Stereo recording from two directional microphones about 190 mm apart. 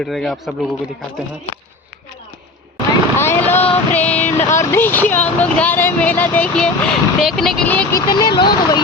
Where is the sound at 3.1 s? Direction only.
10° left (ahead or behind).